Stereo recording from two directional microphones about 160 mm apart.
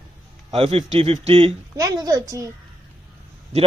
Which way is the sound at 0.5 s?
40° right (ahead or behind).